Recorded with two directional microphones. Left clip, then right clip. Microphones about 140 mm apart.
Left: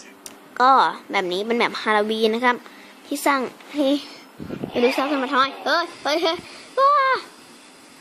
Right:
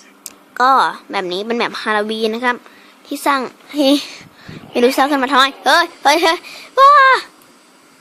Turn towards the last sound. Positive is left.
turn(degrees=-40)  # may be behind; listen again after turning